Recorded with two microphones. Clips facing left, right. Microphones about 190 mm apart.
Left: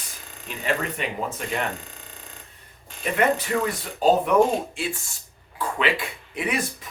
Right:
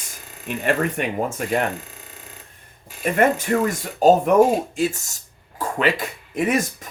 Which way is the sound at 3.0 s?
50° right (ahead or behind).